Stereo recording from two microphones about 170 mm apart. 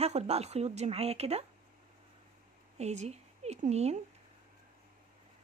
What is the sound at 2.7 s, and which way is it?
A woman's voice, 40° right (ahead or behind).